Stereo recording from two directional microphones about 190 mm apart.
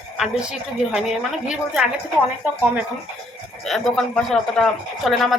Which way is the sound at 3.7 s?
Centre (ahead or behind).